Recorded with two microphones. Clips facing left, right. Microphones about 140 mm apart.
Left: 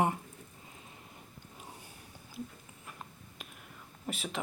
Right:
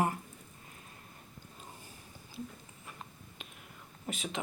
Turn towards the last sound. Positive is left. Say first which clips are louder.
# even
turn(degrees=0)  # may be behind; listen again after turning